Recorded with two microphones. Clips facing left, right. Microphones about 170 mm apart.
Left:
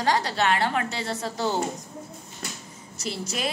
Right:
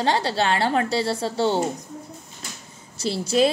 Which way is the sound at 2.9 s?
30° right (ahead or behind).